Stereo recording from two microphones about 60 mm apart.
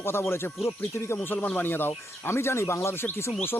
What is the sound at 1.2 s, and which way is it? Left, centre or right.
Speech, left.